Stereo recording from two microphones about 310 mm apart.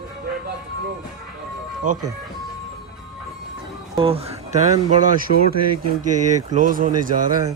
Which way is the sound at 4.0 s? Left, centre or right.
Centre.